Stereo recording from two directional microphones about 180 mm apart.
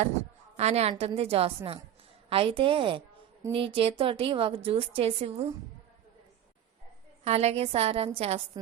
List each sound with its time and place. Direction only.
0.5 s a woman's voice: 35° right (ahead or behind)
7.3 s a woman's voice: 35° right (ahead or behind)